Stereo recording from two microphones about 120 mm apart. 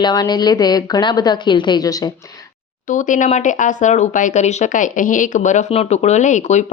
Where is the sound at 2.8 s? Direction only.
90° left.